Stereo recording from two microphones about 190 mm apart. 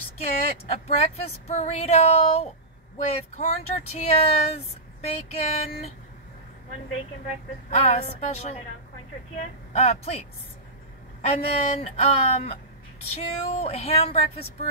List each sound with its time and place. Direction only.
0.7 s speech: 35° left (ahead or behind)
7.7 s speech: 35° left (ahead or behind)
9.7 s a woman's voice: 35° left (ahead or behind)
11.2 s speech: 35° left (ahead or behind)